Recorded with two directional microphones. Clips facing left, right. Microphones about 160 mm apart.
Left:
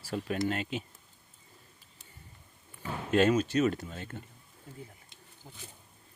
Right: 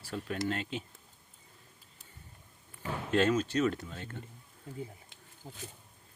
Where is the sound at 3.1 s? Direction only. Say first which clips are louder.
Left 3 dB; 10° left (ahead or behind).